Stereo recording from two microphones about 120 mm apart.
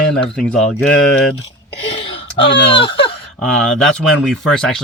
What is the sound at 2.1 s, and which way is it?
Speech, 45° left (ahead or behind).